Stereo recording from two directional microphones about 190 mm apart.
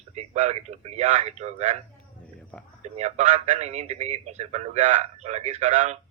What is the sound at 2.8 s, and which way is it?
A man's voice, 35° right (ahead or behind).